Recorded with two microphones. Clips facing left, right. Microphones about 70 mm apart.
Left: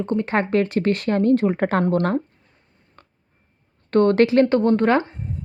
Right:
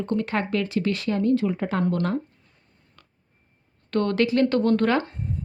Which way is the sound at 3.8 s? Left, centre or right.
Left.